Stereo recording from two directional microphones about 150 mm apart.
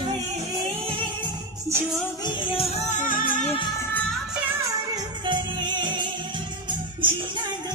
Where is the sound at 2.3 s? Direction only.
35° left (ahead or behind); by 3.5 s 60° left (ahead or behind).